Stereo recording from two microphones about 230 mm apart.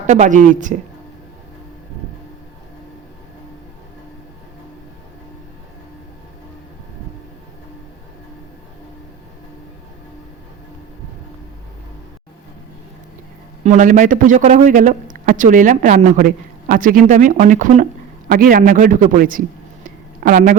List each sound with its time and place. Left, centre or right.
0.1 s a man's voice: right
13.7 s a man's voice: right
19.8 s a sound: right